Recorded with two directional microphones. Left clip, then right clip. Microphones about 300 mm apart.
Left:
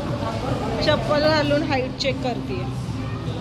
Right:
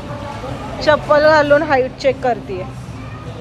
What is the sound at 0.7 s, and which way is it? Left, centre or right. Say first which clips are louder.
A woman's voice: right 9 dB; centre.